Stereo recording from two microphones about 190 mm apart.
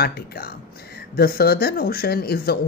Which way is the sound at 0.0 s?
55° left (ahead or behind).